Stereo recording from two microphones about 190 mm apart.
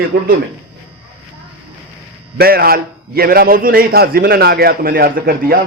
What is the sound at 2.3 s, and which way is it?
A man's voice, 55° right (ahead or behind).